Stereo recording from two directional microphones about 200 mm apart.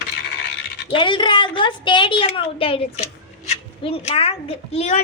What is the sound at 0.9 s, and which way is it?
A woman's voice, 25° left (ahead or behind).